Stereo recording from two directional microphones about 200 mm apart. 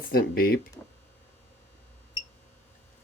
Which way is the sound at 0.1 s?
50° left (ahead or behind).